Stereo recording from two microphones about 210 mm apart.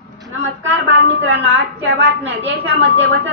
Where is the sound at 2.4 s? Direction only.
55° right (ahead or behind).